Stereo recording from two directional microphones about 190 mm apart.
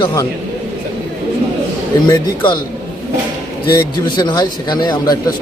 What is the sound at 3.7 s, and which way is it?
A man's voice, 20° left (ahead or behind).